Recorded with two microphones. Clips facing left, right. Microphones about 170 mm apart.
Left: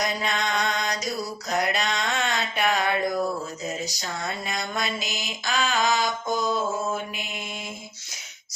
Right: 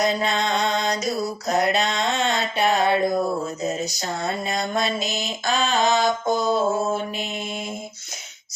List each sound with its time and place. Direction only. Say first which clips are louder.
0.0 s music: right 5 dB; 30° right (ahead or behind)
1.5 s mantra: right 4 dB; 25° right (ahead or behind)